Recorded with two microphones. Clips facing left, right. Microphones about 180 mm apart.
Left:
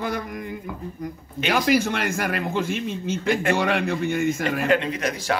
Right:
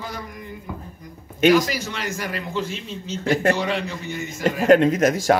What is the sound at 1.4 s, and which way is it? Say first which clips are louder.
Speech: right 10 dB; 45° right (ahead or behind).